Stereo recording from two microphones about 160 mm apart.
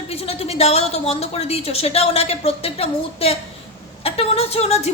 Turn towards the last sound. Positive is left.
turn(degrees=40)  # may be behind; listen again after turning